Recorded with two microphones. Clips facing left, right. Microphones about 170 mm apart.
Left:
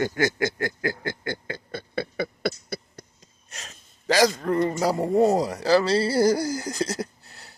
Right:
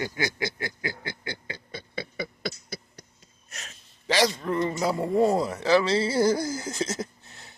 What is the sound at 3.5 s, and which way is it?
A man's voice, 35° left (ahead or behind).